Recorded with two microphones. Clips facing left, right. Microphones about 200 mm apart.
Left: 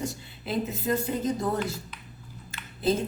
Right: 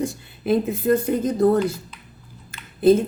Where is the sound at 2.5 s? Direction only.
55° right (ahead or behind).